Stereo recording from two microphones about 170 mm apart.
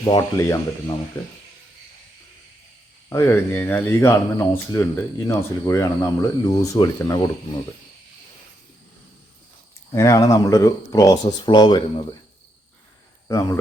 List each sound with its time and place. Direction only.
0.0 s speech: 25° left (ahead or behind)
3.1 s speech: 15° left (ahead or behind)
9.9 s speech: 20° left (ahead or behind)
13.2 s speech: 20° left (ahead or behind)